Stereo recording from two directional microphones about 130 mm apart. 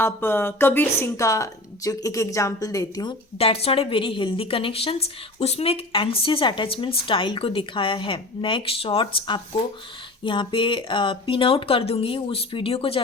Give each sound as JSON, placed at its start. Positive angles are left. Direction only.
{"t": 0.0, "sound": "a woman's voice", "side_deg": 15}
{"t": 3.3, "sound": "a woman's voice", "side_deg": 50}